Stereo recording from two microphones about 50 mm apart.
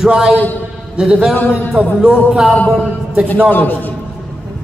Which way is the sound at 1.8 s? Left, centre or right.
Right.